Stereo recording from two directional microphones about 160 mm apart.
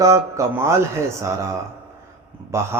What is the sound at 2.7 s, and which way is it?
Speech, 15° right (ahead or behind).